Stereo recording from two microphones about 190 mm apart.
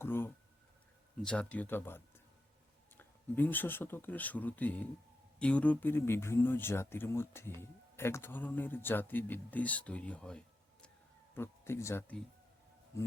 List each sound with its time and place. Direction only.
0.0 s speech: 10° left (ahead or behind)